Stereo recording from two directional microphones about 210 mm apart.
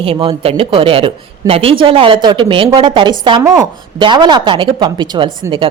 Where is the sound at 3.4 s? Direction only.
5° right (ahead or behind).